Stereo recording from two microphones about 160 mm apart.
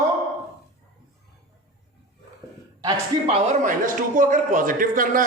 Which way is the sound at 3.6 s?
55° right (ahead or behind).